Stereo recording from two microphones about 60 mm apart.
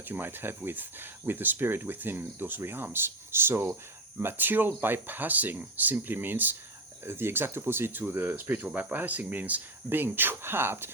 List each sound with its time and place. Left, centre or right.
0.0 s speech: right